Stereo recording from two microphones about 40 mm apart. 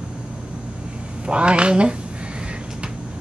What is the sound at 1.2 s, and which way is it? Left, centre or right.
Speech, right.